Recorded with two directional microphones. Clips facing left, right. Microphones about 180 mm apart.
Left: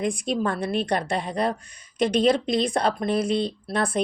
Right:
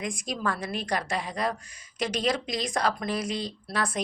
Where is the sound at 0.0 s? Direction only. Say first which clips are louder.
Left 6 dB; 30° left (ahead or behind).